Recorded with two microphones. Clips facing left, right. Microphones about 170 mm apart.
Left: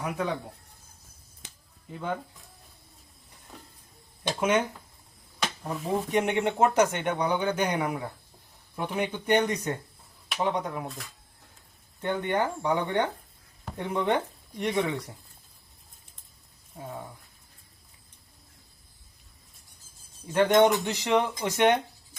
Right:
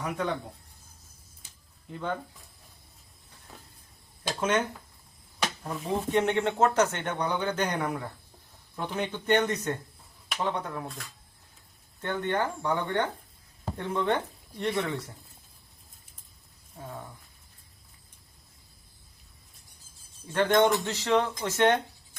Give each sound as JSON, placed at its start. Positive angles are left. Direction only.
{"t": 0.0, "sound": "speech", "side_deg": 10}
{"t": 1.4, "sound": "a sound", "side_deg": 75}
{"t": 1.9, "sound": "speech", "side_deg": 10}
{"t": 4.4, "sound": "speech", "side_deg": 10}
{"t": 5.6, "sound": "speech", "side_deg": 0}
{"t": 5.9, "sound": "speech", "side_deg": 15}
{"t": 12.0, "sound": "speech", "side_deg": 15}
{"t": 16.7, "sound": "speech", "side_deg": 15}
{"t": 20.3, "sound": "speech", "side_deg": 15}